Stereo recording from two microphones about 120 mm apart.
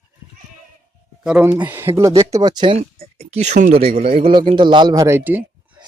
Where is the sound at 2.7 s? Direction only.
60° right (ahead or behind); by 5.0 s 35° right (ahead or behind).